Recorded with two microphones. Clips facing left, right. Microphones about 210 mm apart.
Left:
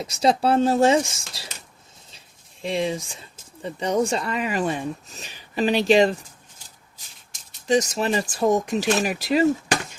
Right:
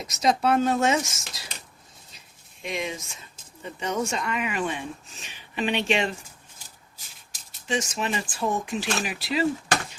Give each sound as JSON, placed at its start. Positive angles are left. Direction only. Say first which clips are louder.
{"t": 0.0, "sound": "speech", "louder": "left 3 dB", "side_deg": 30}
{"t": 7.7, "sound": "speech", "louder": "left 7 dB", "side_deg": 40}